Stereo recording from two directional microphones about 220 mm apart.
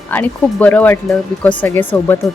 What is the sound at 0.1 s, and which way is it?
Speech, 10° left (ahead or behind).